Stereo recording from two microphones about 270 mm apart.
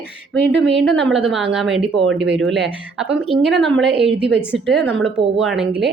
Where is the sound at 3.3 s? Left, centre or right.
Centre.